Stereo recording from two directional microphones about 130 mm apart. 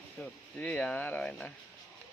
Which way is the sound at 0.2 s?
10° left (ahead or behind).